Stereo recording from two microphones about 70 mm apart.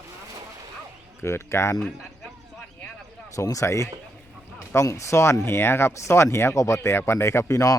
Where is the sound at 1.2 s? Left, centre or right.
Left.